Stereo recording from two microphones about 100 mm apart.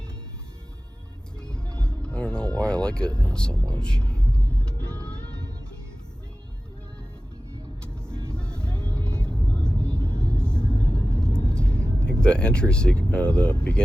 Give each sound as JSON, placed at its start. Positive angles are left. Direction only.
{"t": 1.4, "sound": "music", "side_deg": 10}
{"t": 3.7, "sound": "speech", "side_deg": 10}
{"t": 7.8, "sound": "vehicle", "side_deg": 10}
{"t": 9.8, "sound": "vehicle", "side_deg": -35}
{"t": 10.1, "sound": "vehicle", "side_deg": 10}